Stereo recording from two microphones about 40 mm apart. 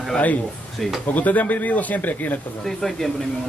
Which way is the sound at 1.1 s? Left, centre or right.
Left.